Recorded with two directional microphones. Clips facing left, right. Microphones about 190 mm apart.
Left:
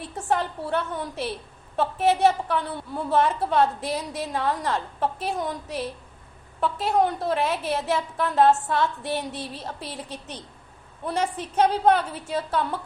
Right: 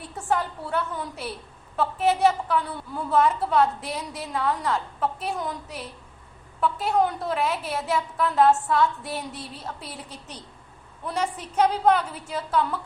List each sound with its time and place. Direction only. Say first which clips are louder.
0.3 s a woman's voice: left 2 dB; 25° left (ahead or behind)
6.6 s a woman's voice: even; 30° left (ahead or behind)